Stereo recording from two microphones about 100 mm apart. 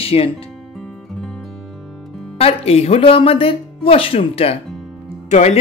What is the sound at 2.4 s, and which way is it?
Speech, 80° left.